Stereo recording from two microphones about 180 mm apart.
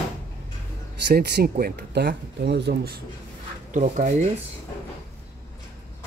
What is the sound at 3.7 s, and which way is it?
Speech, 45° right (ahead or behind).